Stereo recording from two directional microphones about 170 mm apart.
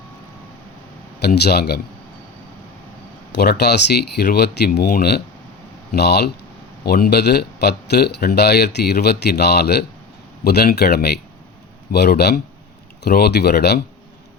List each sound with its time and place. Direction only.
1.2 s speech: 70° left (ahead or behind)
3.6 s speech: 75° left (ahead or behind)